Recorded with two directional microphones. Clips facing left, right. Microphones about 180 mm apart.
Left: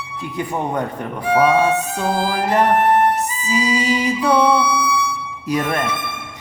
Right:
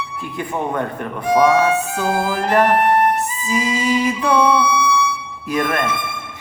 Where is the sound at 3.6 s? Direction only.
20° left (ahead or behind).